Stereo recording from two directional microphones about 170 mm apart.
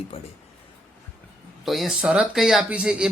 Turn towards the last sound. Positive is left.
turn(degrees=-5)  # may be behind; listen again after turning